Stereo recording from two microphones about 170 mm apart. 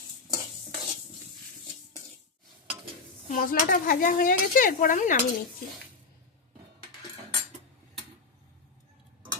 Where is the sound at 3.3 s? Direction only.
55° left (ahead or behind).